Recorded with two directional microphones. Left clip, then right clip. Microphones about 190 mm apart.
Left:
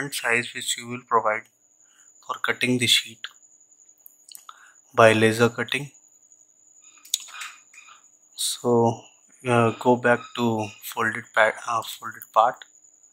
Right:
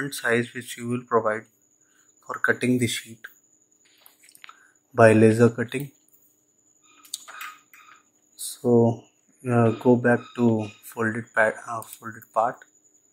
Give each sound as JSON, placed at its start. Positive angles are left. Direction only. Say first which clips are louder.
{"t": 0.0, "sound": "speech", "louder": "even", "side_deg": 20}
{"t": 4.9, "sound": "speech", "louder": "even", "side_deg": 20}
{"t": 7.1, "sound": "a sound", "louder": "left 10 dB", "side_deg": 15}
{"t": 8.5, "sound": "speech", "louder": "right 1 dB", "side_deg": 30}
{"t": 11.5, "sound": "speech", "louder": "left 6 dB", "side_deg": 25}